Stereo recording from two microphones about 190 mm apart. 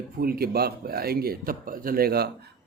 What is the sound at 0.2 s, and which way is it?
Speech, 55° right (ahead or behind).